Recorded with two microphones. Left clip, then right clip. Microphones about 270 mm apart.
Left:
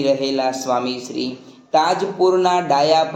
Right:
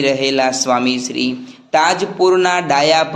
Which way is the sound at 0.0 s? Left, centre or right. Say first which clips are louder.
Right 3 dB; right.